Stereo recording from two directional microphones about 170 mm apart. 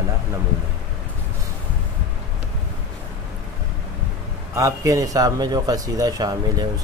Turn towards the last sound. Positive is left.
turn(degrees=-20)  # may be behind; listen again after turning